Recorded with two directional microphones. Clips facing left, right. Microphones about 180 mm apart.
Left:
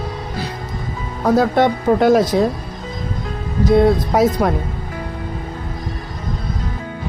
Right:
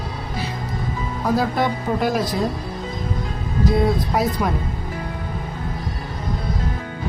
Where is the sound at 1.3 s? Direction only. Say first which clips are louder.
Left 6 dB; 85° left.